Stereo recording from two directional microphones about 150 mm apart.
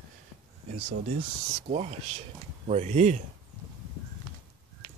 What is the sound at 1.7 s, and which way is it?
Speech, 45° right (ahead or behind).